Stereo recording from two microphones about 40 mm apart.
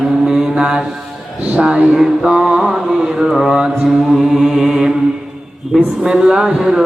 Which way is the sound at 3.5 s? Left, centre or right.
Centre.